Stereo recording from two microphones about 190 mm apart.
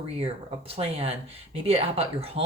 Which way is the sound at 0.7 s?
30° right (ahead or behind).